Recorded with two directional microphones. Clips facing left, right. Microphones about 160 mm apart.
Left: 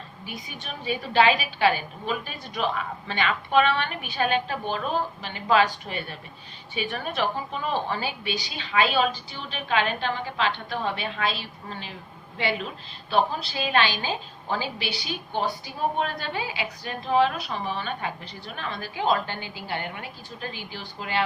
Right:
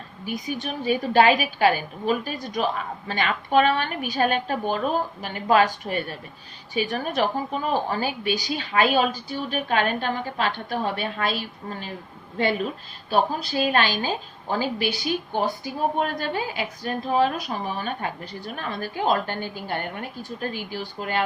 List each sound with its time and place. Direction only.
0.3 s a woman's voice: 45° right (ahead or behind)